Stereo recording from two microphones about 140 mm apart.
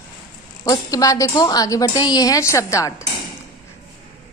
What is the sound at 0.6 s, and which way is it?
A woman's voice, 25° left (ahead or behind).